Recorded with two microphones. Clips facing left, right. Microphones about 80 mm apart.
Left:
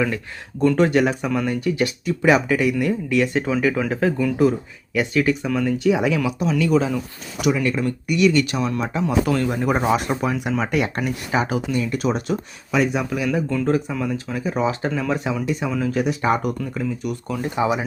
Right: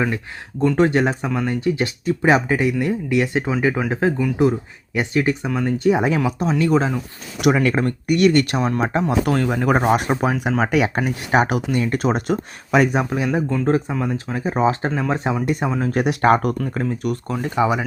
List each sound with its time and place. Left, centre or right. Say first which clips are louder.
0.8 s speech: right 3 dB; right
5.6 s speech: right 2 dB; right
7.4 s speech: right 3 dB; right
7.8 s speech: right 2 dB; right
9.2 s speech: right 2 dB; right
9.8 s speech: right 2 dB; right
11.3 s speech: right 5 dB; right
13.0 s speech: right 2 dB; right
16.0 s speech: right 4 dB; right